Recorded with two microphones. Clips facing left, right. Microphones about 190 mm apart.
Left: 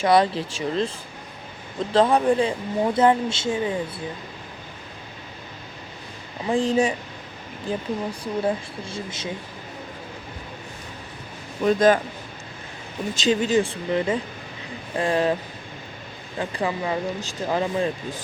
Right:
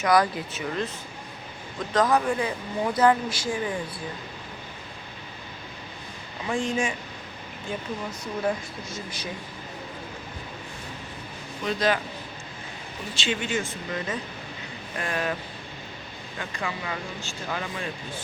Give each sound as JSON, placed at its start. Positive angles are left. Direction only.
{"t": 0.0, "sound": "speech", "side_deg": 30}
{"t": 1.9, "sound": "speech", "side_deg": 30}
{"t": 6.5, "sound": "speech", "side_deg": 35}
{"t": 11.6, "sound": "speech", "side_deg": 45}
{"t": 13.1, "sound": "speech", "side_deg": 40}
{"t": 16.4, "sound": "speech", "side_deg": 35}